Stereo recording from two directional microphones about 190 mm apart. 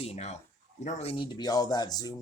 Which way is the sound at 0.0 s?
35° left (ahead or behind).